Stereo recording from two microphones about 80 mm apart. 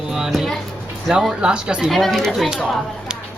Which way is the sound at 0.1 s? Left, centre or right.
Centre.